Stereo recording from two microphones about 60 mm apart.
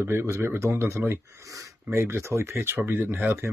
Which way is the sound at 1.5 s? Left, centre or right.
Right.